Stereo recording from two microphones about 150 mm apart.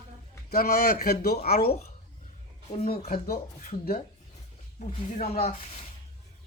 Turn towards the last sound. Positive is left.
turn(degrees=45)  # may be behind; listen again after turning